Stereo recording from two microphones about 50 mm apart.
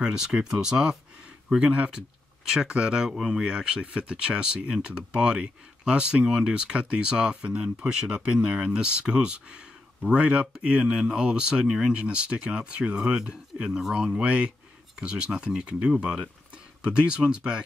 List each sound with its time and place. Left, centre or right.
0.0 s speech: centre
3.4 s speech: centre
6.5 s speech: right
13.7 s speech: centre
13.9 s speech: centre